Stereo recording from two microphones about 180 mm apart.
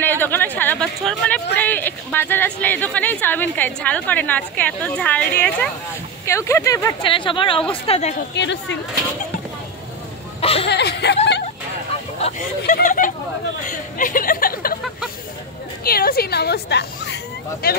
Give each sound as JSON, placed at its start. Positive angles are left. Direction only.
{"t": 0.0, "sound": "a sound", "side_deg": 10}
{"t": 0.6, "sound": "speech", "side_deg": 10}
{"t": 7.1, "sound": "a woman's voice", "side_deg": 30}
{"t": 8.4, "sound": "speech", "side_deg": 80}
{"t": 10.4, "sound": "a sound", "side_deg": 35}
{"t": 10.7, "sound": "speech", "side_deg": 70}
{"t": 12.2, "sound": "speech", "side_deg": 45}
{"t": 15.8, "sound": "speech", "side_deg": 55}